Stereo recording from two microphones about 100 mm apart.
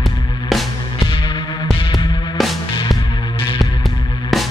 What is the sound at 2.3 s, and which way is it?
Music, centre (ahead or behind).